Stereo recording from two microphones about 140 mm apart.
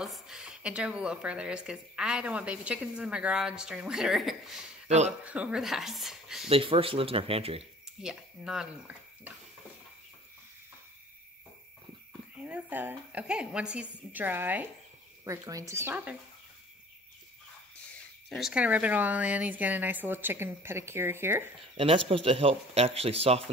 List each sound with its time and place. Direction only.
0.0 s a woman's voice: 5° right (ahead or behind)
4.8 s speech: 55° right (ahead or behind)
5.2 s speech: 10° right (ahead or behind)
6.5 s speech: 40° right (ahead or behind)
8.0 s speech: 5° right (ahead or behind)
12.4 s a woman's voice: 10° right (ahead or behind)
17.8 s a woman's voice: centre (ahead or behind); by 21.5 s 15° right (ahead or behind)
21.7 s speech: 40° right (ahead or behind)